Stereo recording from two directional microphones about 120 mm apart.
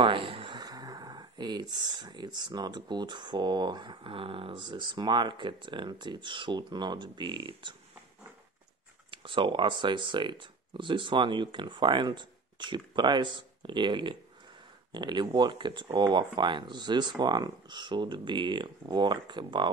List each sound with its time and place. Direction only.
0.0 s speech: 45° right (ahead or behind)
9.1 s speech: 45° right (ahead or behind)